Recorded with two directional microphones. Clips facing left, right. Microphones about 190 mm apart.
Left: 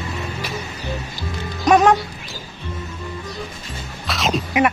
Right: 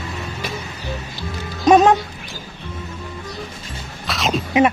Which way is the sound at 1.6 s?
20° right (ahead or behind).